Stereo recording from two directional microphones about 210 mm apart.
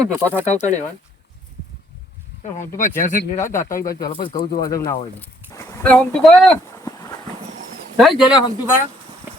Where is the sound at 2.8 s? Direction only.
35° left (ahead or behind).